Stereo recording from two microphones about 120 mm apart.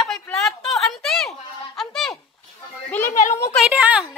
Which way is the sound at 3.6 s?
10° right (ahead or behind).